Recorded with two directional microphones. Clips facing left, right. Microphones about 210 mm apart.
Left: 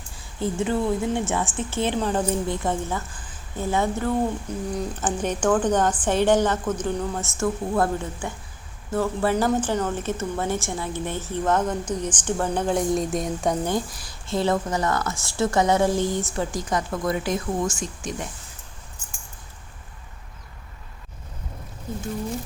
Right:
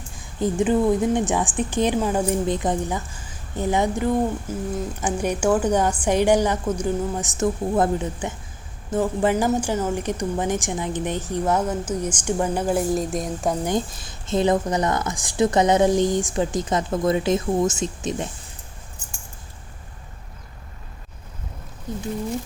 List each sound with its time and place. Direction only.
0.3 s a woman's voice: 15° right (ahead or behind); by 13.6 s centre (ahead or behind)
13.7 s a woman's voice: 20° right (ahead or behind)